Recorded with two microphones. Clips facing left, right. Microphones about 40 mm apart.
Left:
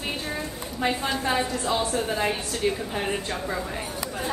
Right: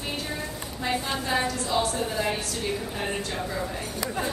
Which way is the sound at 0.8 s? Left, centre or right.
Left.